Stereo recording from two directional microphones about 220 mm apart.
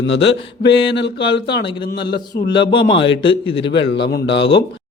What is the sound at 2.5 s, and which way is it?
A man's voice, 20° left (ahead or behind).